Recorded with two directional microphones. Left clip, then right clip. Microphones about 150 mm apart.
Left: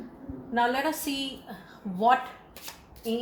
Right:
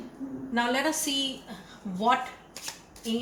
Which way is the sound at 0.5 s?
50° left (ahead or behind).